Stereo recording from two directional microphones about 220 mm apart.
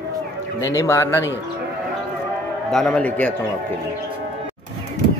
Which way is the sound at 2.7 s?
5° left (ahead or behind).